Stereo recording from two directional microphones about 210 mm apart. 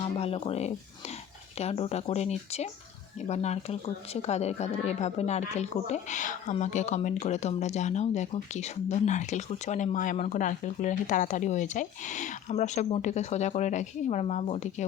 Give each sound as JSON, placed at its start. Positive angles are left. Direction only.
{"t": 0.0, "sound": "speech", "side_deg": 30}